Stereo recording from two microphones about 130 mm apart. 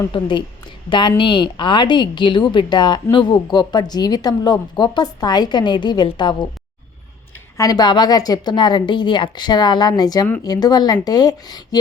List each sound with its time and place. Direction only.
0.1 s a woman's voice: 35° left (ahead or behind)
7.5 s a woman's voice: 30° left (ahead or behind)